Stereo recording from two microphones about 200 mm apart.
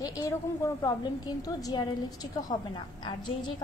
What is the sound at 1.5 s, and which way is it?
A woman's voice, 20° left (ahead or behind).